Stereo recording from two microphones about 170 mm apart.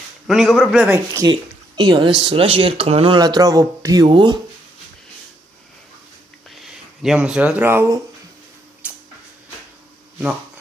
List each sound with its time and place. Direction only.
0.3 s a man's voice: centre (ahead or behind)
0.9 s speech: 15° right (ahead or behind)
1.3 s speech: 30° right (ahead or behind)
3.2 s speech: 20° right (ahead or behind)
6.6 s speech: 5° right (ahead or behind)
8.8 s tick-tock: 10° right (ahead or behind)